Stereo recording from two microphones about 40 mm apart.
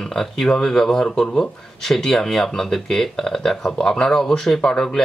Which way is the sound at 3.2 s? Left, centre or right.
Centre.